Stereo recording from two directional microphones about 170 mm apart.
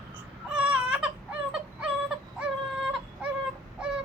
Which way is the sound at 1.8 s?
5° right (ahead or behind).